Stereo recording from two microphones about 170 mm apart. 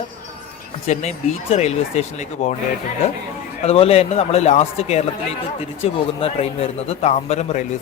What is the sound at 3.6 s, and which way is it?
A man's voice, 35° left (ahead or behind).